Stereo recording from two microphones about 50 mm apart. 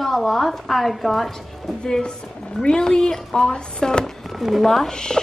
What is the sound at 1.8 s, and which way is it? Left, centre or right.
Speech, centre.